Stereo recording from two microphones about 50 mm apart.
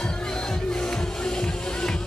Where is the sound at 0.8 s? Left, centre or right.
Centre.